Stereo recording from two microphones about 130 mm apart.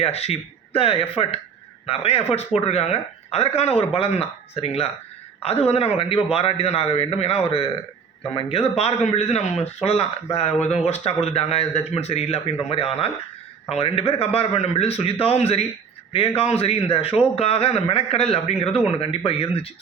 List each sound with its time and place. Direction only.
0.0 s a man's voice: 50° left (ahead or behind)